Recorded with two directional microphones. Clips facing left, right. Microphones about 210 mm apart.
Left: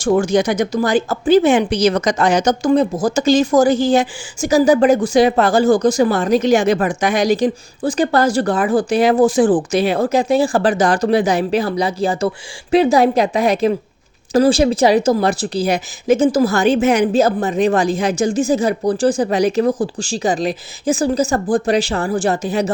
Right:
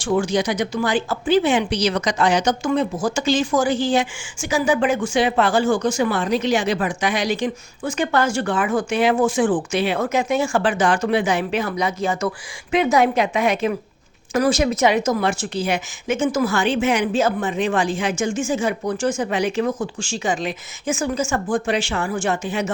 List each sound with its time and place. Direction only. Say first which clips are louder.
0.0 s speech: left 5 dB; 45° left (ahead or behind)